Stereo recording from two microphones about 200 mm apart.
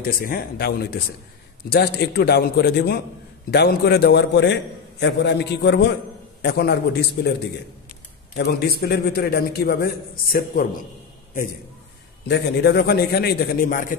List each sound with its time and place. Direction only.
0.1 s a man's voice: 45° left (ahead or behind)
8.4 s a man's voice: 50° left (ahead or behind)
12.3 s a man's voice: 55° left (ahead or behind)